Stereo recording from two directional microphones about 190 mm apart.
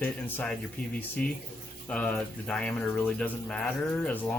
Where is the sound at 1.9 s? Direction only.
5° left (ahead or behind).